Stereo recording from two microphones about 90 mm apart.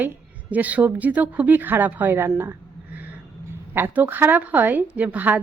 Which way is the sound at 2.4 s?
20° right (ahead or behind).